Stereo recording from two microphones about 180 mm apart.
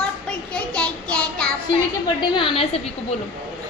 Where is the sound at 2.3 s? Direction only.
30° left (ahead or behind).